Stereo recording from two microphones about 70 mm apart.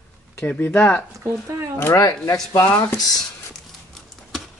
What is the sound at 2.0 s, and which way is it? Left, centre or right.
Speech, left.